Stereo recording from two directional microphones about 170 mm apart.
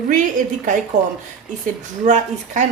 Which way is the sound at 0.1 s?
50° right (ahead or behind).